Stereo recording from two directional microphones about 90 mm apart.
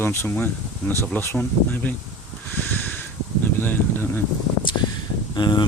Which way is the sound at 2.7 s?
20° left (ahead or behind).